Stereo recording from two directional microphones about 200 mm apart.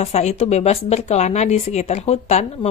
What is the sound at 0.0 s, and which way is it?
Speech, 35° left (ahead or behind).